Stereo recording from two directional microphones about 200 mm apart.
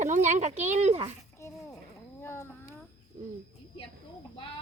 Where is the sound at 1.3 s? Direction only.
15° left (ahead or behind).